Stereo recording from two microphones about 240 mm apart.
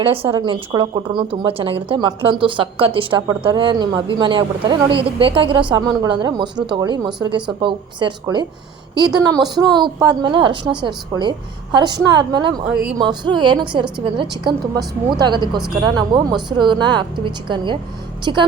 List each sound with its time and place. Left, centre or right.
0.0 s a woman's voice: right
15.5 s speech: centre
16.0 s speech: centre